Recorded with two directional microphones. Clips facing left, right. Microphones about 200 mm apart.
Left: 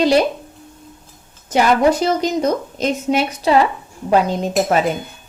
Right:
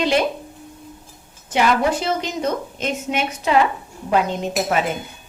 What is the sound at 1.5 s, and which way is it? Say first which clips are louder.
A woman's voice: left 4 dB; 40° left (ahead or behind).